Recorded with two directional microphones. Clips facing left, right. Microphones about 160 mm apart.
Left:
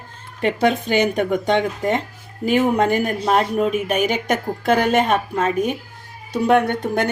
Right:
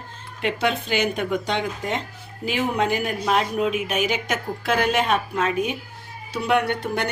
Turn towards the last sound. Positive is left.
turn(degrees=50)  # may be behind; listen again after turning